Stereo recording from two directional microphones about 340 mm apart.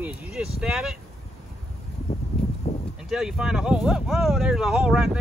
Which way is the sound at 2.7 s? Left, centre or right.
Centre.